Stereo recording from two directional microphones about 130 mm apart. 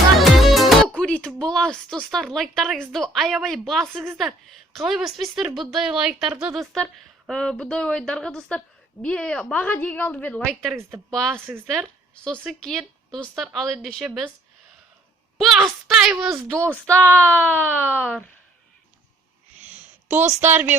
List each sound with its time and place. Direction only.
0.2 s music: centre (ahead or behind)
1.4 s a woman's voice: 5° left (ahead or behind)
11.3 s speech: 15° right (ahead or behind)
11.6 s a woman's voice: 5° right (ahead or behind)
15.5 s a woman's voice: 5° right (ahead or behind)
16.3 s a woman's voice: 20° right (ahead or behind)
17.2 s speech: 10° left (ahead or behind)
19.7 s a woman's voice: 15° right (ahead or behind)